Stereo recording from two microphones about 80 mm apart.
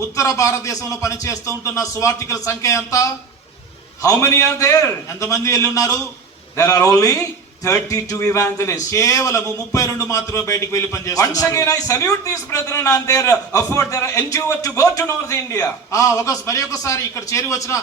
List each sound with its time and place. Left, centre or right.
0.2 s a man's voice: left